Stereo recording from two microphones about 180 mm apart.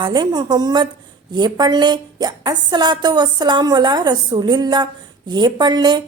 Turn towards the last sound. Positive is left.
turn(degrees=-25)  # may be behind; listen again after turning